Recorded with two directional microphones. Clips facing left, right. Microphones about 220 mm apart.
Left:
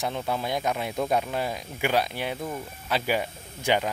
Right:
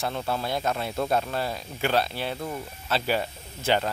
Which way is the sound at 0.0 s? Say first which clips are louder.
Even; 15° left (ahead or behind).